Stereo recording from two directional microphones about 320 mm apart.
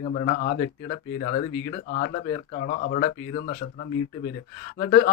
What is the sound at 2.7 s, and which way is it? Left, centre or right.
Speech, left.